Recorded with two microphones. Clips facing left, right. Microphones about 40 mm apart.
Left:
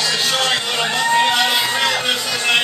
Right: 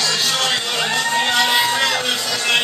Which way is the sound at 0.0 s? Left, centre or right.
Centre.